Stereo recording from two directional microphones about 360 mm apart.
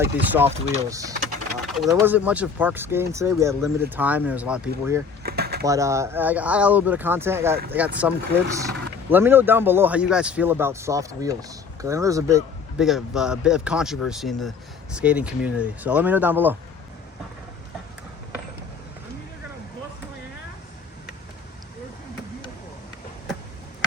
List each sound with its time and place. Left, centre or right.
0.0 s speech: centre
5.2 s a sound: right
5.6 s speech: centre